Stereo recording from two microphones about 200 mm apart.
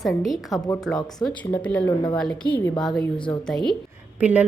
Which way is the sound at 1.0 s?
20° left (ahead or behind).